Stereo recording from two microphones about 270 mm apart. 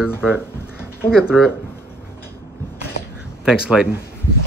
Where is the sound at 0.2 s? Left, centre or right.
Centre.